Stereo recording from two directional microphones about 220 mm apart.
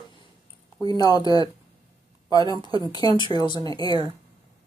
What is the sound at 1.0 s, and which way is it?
Speech, 20° left (ahead or behind).